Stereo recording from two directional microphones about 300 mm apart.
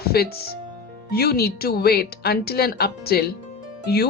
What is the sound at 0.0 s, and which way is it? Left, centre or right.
Speech, left.